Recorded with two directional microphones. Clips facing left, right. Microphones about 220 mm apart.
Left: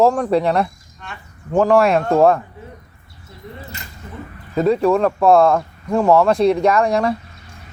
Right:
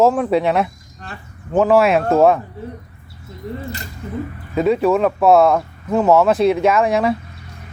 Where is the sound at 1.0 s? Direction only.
35° right (ahead or behind).